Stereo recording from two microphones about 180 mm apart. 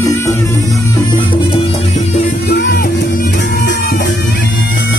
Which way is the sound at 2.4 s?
60° left (ahead or behind).